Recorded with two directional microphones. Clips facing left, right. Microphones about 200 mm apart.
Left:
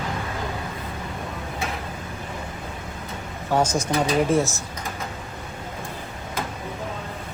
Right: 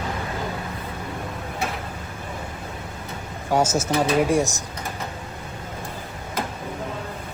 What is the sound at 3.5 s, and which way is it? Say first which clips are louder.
Speech: right 1 dB; 10° right (ahead or behind).